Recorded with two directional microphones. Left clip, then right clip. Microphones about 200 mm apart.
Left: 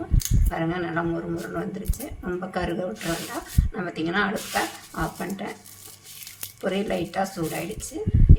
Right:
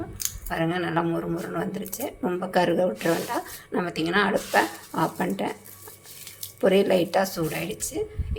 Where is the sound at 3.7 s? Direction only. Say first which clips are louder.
Right 2 dB; 40° right (ahead or behind).